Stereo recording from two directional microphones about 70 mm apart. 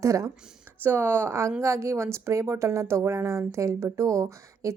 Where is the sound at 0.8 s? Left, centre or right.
Right.